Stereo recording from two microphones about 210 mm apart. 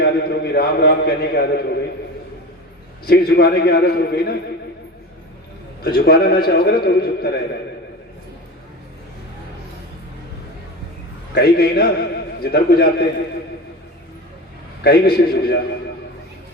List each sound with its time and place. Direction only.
0.0 s a man's voice: 50° left (ahead or behind)
3.1 s a man's voice: 50° left (ahead or behind)
5.8 s a man's voice: 45° left (ahead or behind)
11.3 s a man's voice: 45° left (ahead or behind)
14.8 s a man's voice: 45° left (ahead or behind)